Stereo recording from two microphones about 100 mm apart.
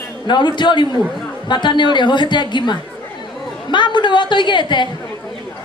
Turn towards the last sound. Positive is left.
turn(degrees=50)  # may be behind; listen again after turning